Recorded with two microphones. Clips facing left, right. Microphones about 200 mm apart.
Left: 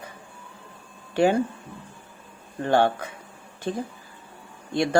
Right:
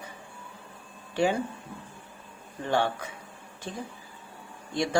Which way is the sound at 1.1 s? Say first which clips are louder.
Left 5 dB; 60° left (ahead or behind).